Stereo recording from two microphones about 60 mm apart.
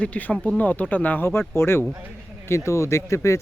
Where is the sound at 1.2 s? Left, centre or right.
Left.